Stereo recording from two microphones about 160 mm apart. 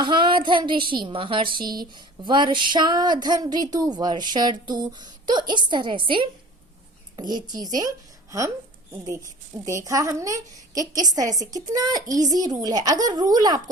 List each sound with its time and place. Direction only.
0.0 s a woman's voice: 30° right (ahead or behind)
9.6 s a woman's voice: 20° right (ahead or behind)